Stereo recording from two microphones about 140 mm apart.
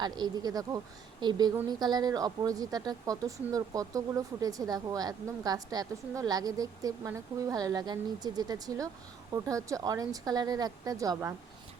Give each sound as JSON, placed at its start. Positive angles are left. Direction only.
{"t": 0.0, "sound": "speech", "side_deg": -30}